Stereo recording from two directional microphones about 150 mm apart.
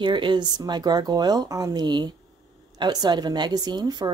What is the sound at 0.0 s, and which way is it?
A woman's voice, 30° right (ahead or behind).